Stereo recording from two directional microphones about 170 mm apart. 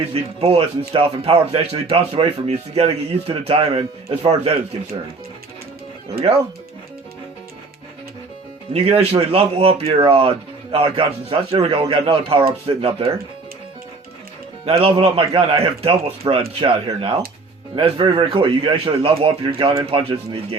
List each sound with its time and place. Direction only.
0.1 s a man's voice: 35° right (ahead or behind)
8.7 s a man's voice: 35° right (ahead or behind)
14.6 s a man's voice: 35° right (ahead or behind)